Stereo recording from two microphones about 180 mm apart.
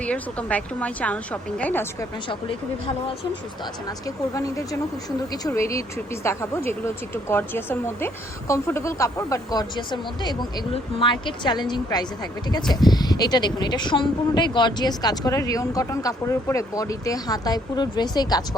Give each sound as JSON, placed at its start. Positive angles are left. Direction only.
{"t": 0.0, "sound": "a woman's voice", "side_deg": 5}
{"t": 3.8, "sound": "a woman's voice", "side_deg": 20}